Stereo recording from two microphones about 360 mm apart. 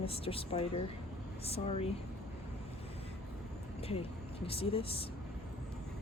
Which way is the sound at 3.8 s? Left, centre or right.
Centre.